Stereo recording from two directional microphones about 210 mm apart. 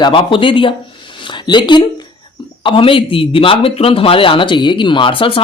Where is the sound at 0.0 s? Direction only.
25° left (ahead or behind).